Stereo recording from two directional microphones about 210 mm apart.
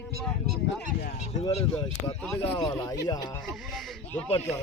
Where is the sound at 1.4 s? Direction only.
20° left (ahead or behind).